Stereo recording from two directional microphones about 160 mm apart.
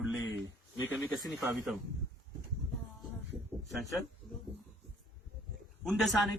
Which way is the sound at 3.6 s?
Centre (ahead or behind).